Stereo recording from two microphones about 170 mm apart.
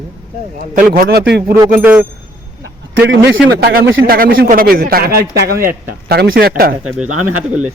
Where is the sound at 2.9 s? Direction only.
85° right; by 6.7 s 60° right (ahead or behind).